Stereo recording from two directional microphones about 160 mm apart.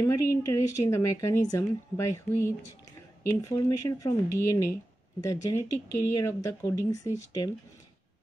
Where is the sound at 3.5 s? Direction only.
20° left (ahead or behind).